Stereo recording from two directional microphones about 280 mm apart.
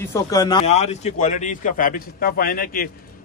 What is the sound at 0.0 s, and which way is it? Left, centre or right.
A man's voice, centre.